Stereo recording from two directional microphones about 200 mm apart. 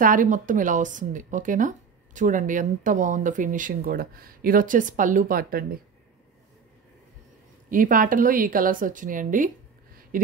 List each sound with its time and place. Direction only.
0.0 s speech: 40° right (ahead or behind)
7.7 s speech: 45° right (ahead or behind)